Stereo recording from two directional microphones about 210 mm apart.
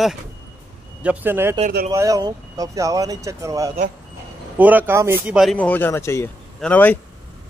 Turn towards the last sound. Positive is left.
turn(degrees=5)  # may be behind; listen again after turning